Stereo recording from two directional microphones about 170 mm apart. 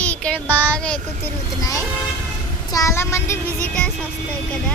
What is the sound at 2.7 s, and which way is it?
Child singing, 20° left (ahead or behind).